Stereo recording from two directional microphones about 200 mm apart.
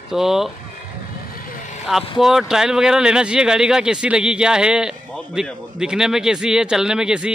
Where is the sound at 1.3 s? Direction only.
45° left (ahead or behind).